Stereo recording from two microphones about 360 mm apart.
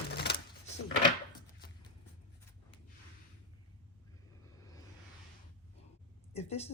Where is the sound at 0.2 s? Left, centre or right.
Left.